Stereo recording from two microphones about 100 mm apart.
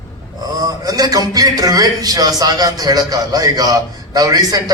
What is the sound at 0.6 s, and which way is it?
A man's voice, 40° right (ahead or behind).